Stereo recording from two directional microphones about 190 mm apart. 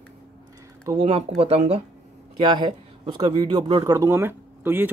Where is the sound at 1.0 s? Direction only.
35° right (ahead or behind).